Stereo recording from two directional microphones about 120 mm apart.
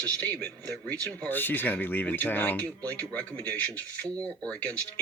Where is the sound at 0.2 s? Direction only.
10° left (ahead or behind).